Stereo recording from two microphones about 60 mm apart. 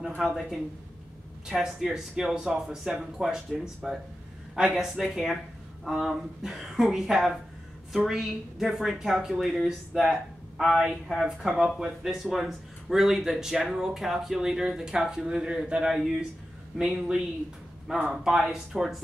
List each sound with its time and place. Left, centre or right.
0.2 s a woman's voice: centre
15.9 s a woman's voice: centre
16.7 s a man's voice: centre
18.1 s a woman's voice: centre